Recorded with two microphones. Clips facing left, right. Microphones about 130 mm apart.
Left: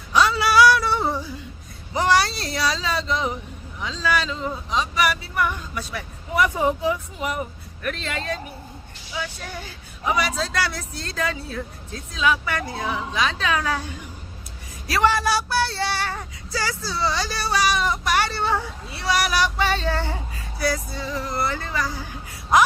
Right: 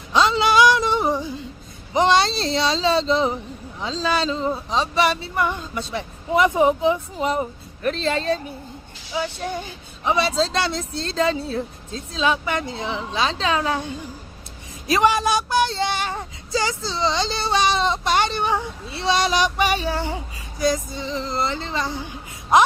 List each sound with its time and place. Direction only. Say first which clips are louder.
0.1 s a sound: right 1 dB; 25° right (ahead or behind)
1.9 s speech: right 3 dB; 20° right (ahead or behind)
14.8 s speech: right 2 dB; 20° right (ahead or behind)